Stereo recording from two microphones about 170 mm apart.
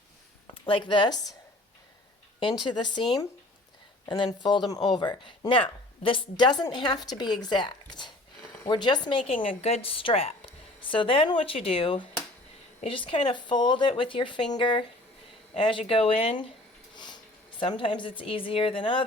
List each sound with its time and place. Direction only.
0.6 s speech: 30° left (ahead or behind)
2.4 s a woman's voice: 25° left (ahead or behind)
16.9 s a sound: 25° left (ahead or behind)
17.6 s a woman's voice: 30° left (ahead or behind)